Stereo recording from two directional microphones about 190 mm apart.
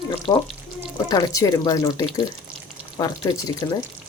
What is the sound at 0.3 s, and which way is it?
Speech, 20° left (ahead or behind).